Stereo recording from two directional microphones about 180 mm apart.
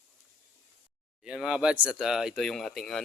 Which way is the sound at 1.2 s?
5° right (ahead or behind).